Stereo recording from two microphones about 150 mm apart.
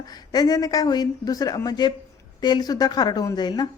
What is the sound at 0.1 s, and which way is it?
Speech, 25° left (ahead or behind).